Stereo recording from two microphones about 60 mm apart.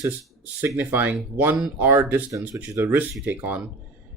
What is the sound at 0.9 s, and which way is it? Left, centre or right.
Speech, right.